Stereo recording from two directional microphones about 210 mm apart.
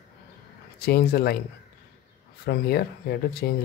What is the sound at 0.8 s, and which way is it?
Speech, 45° left (ahead or behind).